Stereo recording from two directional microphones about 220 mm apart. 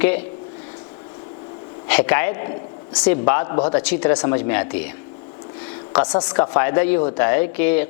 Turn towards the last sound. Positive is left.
turn(degrees=15)  # may be behind; listen again after turning